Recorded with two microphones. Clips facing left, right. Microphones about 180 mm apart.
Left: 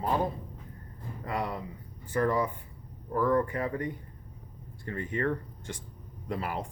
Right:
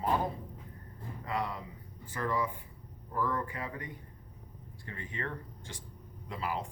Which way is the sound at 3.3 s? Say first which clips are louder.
Left 9 dB; 40° left (ahead or behind).